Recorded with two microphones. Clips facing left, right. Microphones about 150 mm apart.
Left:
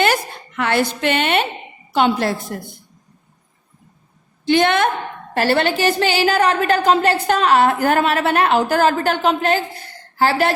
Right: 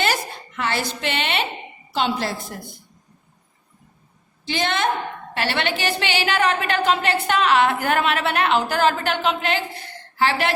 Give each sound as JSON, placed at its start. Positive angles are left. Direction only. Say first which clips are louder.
{"t": 0.0, "sound": "a woman's voice", "louder": "left 5 dB", "side_deg": 55}
{"t": 4.4, "sound": "a woman's voice", "louder": "left 8 dB", "side_deg": 55}
{"t": 5.3, "sound": "a woman's voice", "louder": "left 7 dB", "side_deg": 40}